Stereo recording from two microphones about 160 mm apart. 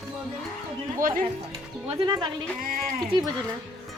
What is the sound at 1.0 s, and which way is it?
Speech, 60° right (ahead or behind).